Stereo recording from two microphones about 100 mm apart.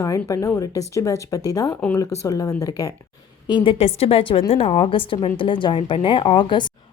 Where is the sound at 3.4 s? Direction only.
55° left (ahead or behind).